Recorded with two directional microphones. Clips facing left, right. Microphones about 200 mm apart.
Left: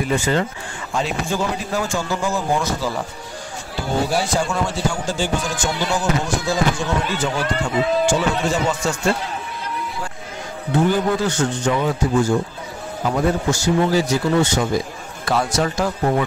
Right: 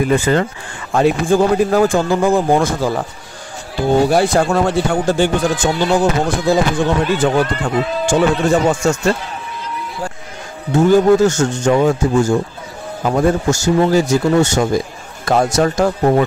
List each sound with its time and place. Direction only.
0.0 s a man's voice: 55° right (ahead or behind)
4.1 s a man's voice: 60° right (ahead or behind)
10.7 s a man's voice: 45° right (ahead or behind)